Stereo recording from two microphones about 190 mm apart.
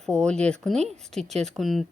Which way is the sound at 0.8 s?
35° right (ahead or behind).